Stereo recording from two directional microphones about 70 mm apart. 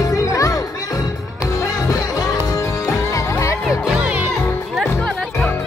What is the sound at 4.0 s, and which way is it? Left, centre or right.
Music, centre.